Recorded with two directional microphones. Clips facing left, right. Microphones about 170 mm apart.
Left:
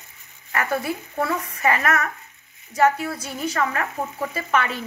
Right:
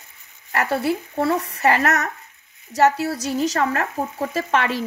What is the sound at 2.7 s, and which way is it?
Speech, 75° right (ahead or behind).